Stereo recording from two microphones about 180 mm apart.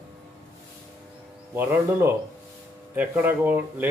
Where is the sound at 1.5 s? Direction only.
10° right (ahead or behind).